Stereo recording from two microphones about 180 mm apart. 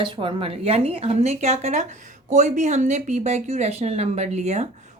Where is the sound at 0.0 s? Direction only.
30° right (ahead or behind).